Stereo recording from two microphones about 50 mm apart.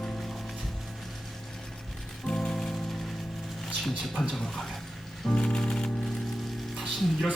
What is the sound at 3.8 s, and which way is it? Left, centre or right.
Speech, centre.